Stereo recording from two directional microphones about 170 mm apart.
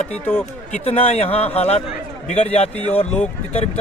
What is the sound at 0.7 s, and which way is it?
A man's voice, 40° left (ahead or behind).